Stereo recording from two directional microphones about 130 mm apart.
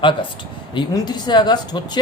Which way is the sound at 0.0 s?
40° left (ahead or behind).